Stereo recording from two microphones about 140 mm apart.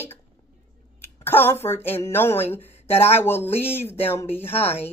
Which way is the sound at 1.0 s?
15° left (ahead or behind).